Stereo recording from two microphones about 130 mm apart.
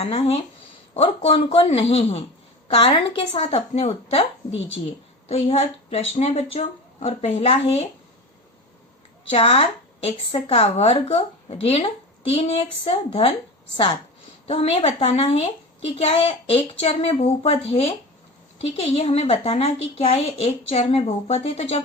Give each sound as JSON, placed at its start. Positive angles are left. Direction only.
{"t": 0.0, "sound": "a woman's voice", "side_deg": 50}
{"t": 9.3, "sound": "a woman's voice", "side_deg": 50}
{"t": 14.4, "sound": "a woman's voice", "side_deg": 50}